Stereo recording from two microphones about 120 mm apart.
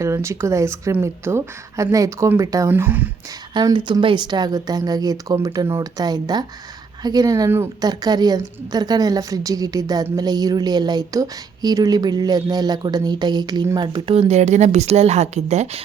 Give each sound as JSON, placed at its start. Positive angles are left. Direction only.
{"t": 0.0, "sound": "speech", "side_deg": -25}
{"t": 2.7, "sound": "speech", "side_deg": -15}
{"t": 3.5, "sound": "a woman's voice", "side_deg": -40}
{"t": 14.2, "sound": "speech", "side_deg": -70}